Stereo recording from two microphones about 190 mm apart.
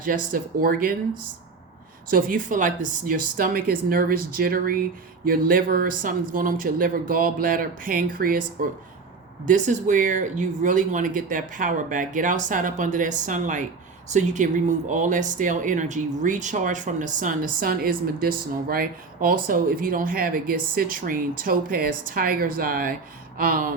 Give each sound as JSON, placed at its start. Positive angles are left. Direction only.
{"t": 0.0, "sound": "speech", "side_deg": -45}
{"t": 2.0, "sound": "speech", "side_deg": -45}